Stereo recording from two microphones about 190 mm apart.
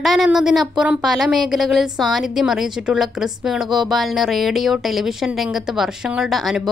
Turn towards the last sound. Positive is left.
turn(degrees=0)  # may be behind; listen again after turning